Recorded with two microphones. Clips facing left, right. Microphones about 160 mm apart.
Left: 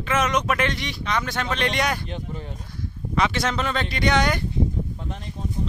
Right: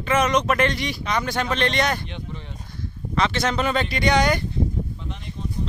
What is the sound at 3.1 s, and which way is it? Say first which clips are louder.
Speech: right 1 dB; 10° left (ahead or behind).